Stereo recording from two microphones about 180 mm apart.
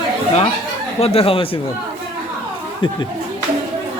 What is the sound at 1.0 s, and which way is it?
Speech, 35° left (ahead or behind).